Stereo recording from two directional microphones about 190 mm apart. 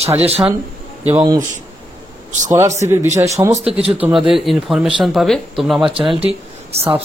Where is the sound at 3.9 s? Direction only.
5° right (ahead or behind).